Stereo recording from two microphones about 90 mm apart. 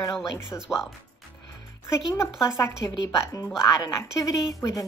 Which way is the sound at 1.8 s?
30° left (ahead or behind).